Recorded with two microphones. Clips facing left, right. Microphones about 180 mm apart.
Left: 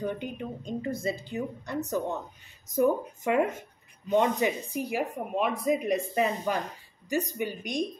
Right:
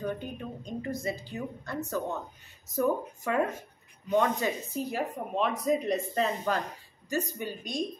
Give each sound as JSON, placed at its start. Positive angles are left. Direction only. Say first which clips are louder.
{"t": 0.0, "sound": "a woman's voice", "louder": "left 2 dB", "side_deg": 20}